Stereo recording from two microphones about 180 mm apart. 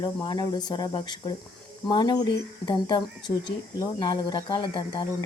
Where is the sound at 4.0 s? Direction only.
25° left (ahead or behind).